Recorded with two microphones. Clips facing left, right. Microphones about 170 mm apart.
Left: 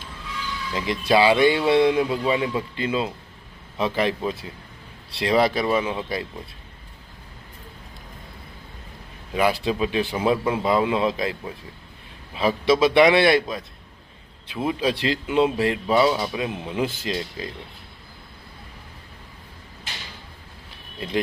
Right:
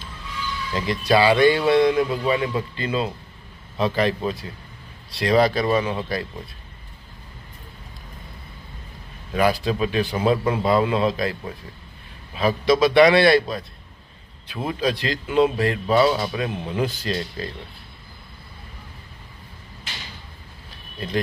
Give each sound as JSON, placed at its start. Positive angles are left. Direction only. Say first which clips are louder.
{"t": 0.7, "sound": "a man's voice", "louder": "right 1 dB", "side_deg": 15}
{"t": 5.6, "sound": "speech", "louder": "right 1 dB", "side_deg": 10}
{"t": 9.3, "sound": "a man's voice", "louder": "right 1 dB", "side_deg": 20}
{"t": 16.8, "sound": "speech", "louder": "even", "side_deg": 25}